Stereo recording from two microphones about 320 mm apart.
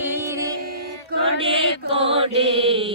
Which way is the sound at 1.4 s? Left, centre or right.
Centre.